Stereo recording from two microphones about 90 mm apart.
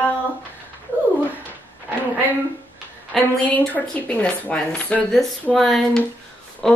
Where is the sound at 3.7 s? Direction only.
15° left (ahead or behind).